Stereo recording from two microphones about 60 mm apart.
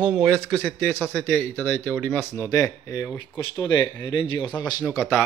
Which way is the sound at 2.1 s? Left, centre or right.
Left.